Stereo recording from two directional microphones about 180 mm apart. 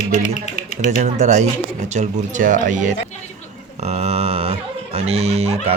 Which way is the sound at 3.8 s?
35° right (ahead or behind).